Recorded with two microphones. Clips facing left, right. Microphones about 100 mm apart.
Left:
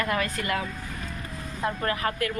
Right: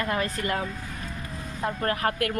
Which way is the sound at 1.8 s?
45° right (ahead or behind).